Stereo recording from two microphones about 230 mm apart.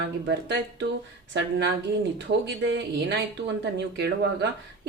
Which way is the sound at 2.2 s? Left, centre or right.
Right.